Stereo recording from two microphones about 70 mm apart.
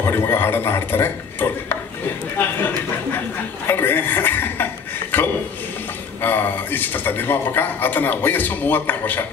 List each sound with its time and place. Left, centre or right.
0.0 s a man's voice: left